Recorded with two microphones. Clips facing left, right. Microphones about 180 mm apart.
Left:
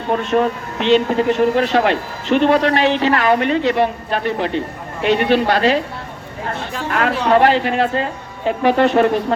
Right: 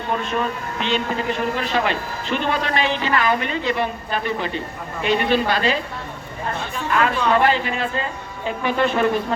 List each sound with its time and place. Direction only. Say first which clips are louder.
0.3 s a man's voice: left 7 dB; 75° left (ahead or behind)